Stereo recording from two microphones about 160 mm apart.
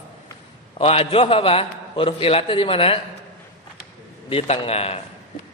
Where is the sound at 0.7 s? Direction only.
40° left (ahead or behind).